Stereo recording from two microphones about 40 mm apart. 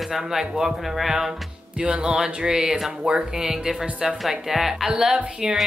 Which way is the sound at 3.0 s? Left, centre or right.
Centre.